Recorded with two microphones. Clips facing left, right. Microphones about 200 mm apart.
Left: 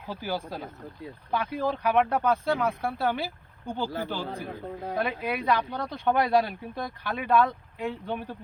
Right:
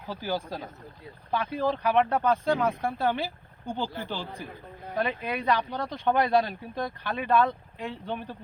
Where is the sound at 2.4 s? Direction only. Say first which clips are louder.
Right 1 dB; 15° right (ahead or behind).